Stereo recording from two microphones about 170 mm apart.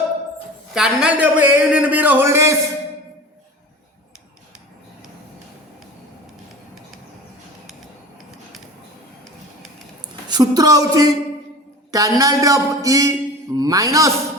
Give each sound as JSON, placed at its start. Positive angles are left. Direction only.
{"t": 0.7, "sound": "a man's voice", "side_deg": -5}
{"t": 10.2, "sound": "a woman's voice", "side_deg": -25}